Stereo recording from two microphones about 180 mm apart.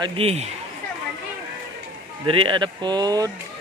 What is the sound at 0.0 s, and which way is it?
Speech, 35° right (ahead or behind).